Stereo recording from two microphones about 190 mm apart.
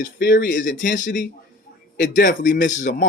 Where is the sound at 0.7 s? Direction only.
40° left (ahead or behind).